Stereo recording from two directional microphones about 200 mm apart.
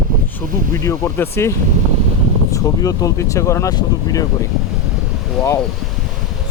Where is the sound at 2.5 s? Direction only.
15° left (ahead or behind).